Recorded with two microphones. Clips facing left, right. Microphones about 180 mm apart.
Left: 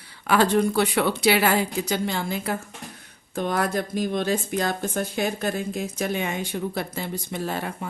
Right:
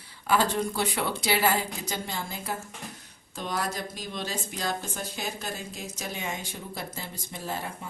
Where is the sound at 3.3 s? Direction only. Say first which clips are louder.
Left 8 dB; 55° left (ahead or behind).